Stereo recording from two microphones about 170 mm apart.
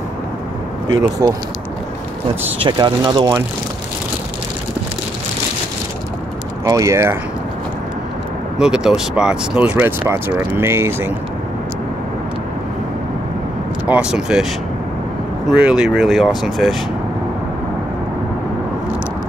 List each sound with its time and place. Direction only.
2.6 s speech: 25° right (ahead or behind)
6.6 s speech: 20° right (ahead or behind)
8.5 s speech: 5° right (ahead or behind)
13.8 s speech: 5° right (ahead or behind)
15.4 s speech: 5° right (ahead or behind)